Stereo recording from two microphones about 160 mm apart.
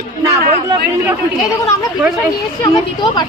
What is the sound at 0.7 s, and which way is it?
Speech, 20° right (ahead or behind).